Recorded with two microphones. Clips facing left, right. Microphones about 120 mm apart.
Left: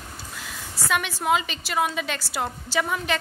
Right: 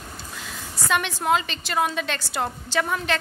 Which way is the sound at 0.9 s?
5° left (ahead or behind).